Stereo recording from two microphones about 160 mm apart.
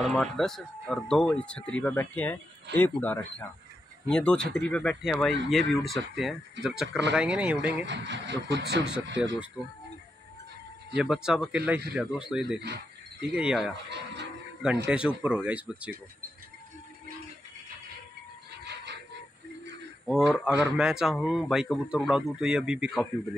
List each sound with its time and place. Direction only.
0.0 s a man's voice: centre (ahead or behind)
7.8 s speech: 90° right
11.0 s a man's voice: 5° right (ahead or behind)
12.5 s a sound: 90° right
13.3 s a man's voice: 5° right (ahead or behind)
13.8 s speech: 90° right
14.9 s speech: 5° right (ahead or behind)
18.6 s bird: 90° right
20.1 s a man's voice: centre (ahead or behind)